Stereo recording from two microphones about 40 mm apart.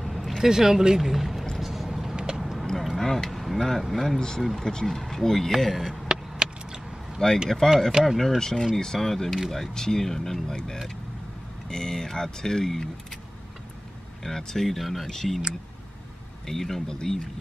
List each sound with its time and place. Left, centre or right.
0.0 s vehicle: centre
0.4 s speech: centre
1.6 s vehicle: centre
3.0 s speech: centre
4.6 s speech: centre
6.0 s vehicle: right
7.4 s speech: centre
8.0 s speech: centre
8.4 s speech: centre
14.2 s speech: centre
16.4 s speech: centre